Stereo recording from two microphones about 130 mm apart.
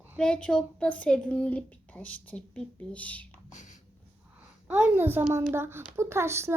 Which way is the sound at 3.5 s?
65° left (ahead or behind).